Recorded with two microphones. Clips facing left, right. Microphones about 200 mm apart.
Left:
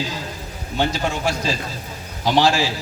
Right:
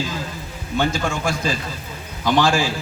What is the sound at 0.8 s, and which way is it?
A man's voice, 50° right (ahead or behind).